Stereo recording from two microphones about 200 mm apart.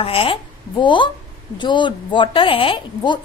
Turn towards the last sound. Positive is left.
turn(degrees=25)  # may be behind; listen again after turning